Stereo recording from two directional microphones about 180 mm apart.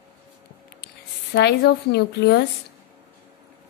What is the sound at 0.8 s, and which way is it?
A woman's voice, 70° left (ahead or behind).